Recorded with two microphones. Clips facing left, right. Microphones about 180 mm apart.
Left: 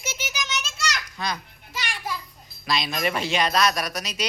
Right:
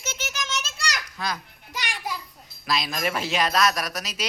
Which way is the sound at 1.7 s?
15° right (ahead or behind).